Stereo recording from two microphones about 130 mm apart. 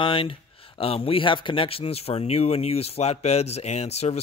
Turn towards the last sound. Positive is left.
turn(degrees=55)  # may be behind; listen again after turning